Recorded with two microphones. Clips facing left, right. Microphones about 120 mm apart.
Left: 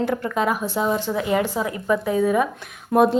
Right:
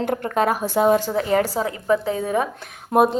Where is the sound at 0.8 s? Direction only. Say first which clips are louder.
Right 6 dB; 60° right (ahead or behind).